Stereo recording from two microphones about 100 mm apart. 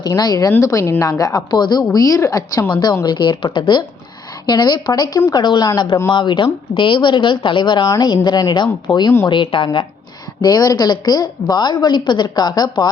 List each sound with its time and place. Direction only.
0.1 s a woman's voice: 35° left (ahead or behind)
1.8 s a woman's voice: 35° left (ahead or behind)
2.6 s a woman's voice: 50° left (ahead or behind)
10.4 s a woman's voice: 40° left (ahead or behind)